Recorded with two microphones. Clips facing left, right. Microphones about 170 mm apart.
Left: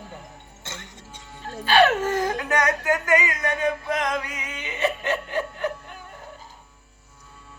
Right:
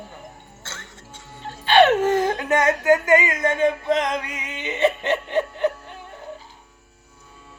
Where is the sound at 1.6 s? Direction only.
25° right (ahead or behind).